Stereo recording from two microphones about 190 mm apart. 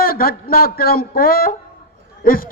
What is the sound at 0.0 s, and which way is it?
A man's voice, 50° left (ahead or behind).